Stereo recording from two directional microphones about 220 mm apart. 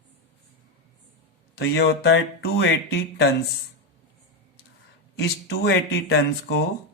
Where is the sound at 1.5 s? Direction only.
50° left (ahead or behind).